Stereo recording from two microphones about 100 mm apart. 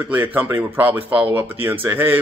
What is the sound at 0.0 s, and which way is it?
Speech, 20° right (ahead or behind).